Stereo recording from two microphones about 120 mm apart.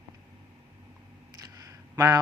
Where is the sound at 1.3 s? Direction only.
30° right (ahead or behind).